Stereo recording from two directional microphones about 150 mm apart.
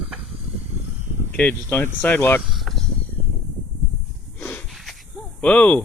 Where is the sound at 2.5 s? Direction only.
Centre (ahead or behind).